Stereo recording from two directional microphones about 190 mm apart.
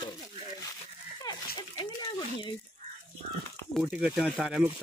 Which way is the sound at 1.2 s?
20° left (ahead or behind).